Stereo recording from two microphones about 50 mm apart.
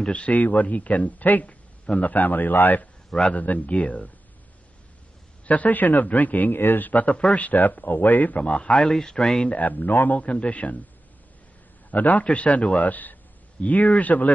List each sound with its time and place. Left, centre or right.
0.0 s speech: left
5.5 s speech: left; by 9.5 s centre
9.5 s speech: left
11.9 s a man's voice: left